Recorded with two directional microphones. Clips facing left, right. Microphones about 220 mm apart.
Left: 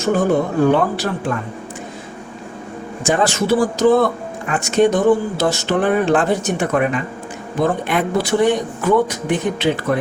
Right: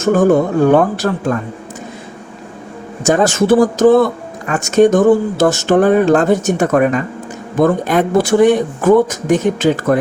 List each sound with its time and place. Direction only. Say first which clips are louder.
0.0 s speech: right 5 dB; 45° right (ahead or behind)
3.0 s speech: right 5 dB; 45° right (ahead or behind)